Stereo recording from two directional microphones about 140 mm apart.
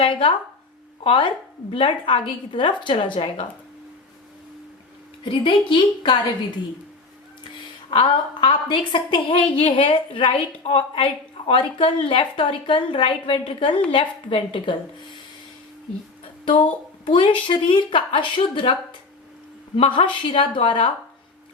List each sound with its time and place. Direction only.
0.0 s a woman's voice: 40° left (ahead or behind)
5.2 s a woman's voice: 35° left (ahead or behind)
7.9 s a woman's voice: 40° left (ahead or behind)
17.1 s a woman's voice: 35° left (ahead or behind)